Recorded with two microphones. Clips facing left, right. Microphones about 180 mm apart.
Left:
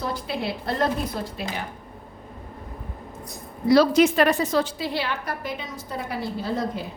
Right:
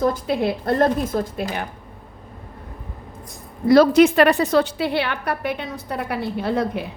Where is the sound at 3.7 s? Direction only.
55° right (ahead or behind).